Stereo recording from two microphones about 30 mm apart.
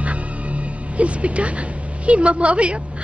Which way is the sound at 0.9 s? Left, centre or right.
Right.